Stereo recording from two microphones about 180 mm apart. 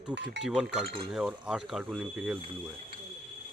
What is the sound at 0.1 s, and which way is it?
Speech, 75° right (ahead or behind).